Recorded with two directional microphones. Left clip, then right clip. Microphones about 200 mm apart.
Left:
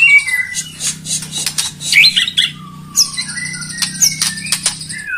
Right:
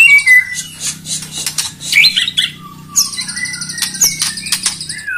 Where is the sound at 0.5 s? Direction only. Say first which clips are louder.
Even; 25° left (ahead or behind).